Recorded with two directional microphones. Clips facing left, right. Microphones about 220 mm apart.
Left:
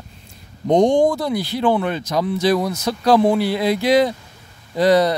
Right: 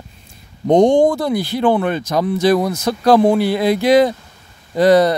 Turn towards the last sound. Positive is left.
turn(degrees=-50)  # may be behind; listen again after turning